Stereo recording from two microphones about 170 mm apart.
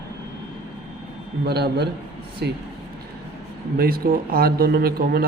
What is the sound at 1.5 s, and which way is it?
Speech, 75° right (ahead or behind).